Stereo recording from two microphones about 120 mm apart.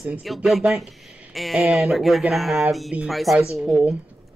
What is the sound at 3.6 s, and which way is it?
Speech, 15° right (ahead or behind).